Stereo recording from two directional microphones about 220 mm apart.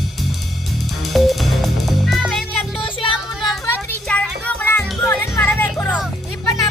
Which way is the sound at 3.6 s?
10° left (ahead or behind).